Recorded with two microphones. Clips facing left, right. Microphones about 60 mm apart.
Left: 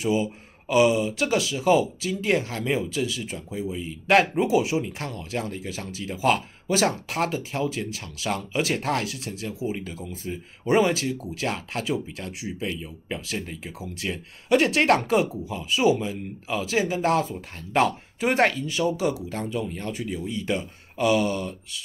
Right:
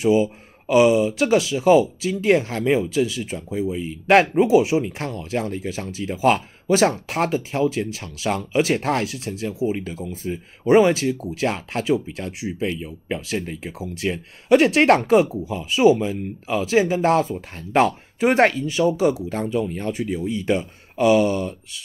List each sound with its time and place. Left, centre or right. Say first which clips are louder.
0.0 s speech: right 6 dB; right
12.5 s speech: right 5 dB; right